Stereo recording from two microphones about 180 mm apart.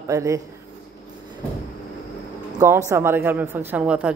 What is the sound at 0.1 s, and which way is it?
Speech, 15° right (ahead or behind).